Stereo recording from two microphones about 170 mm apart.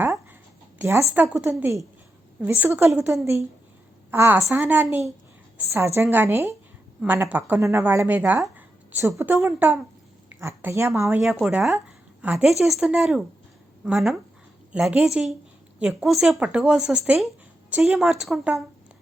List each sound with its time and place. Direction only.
0.8 s a woman's voice: 15° right (ahead or behind)
11.2 s speech: centre (ahead or behind)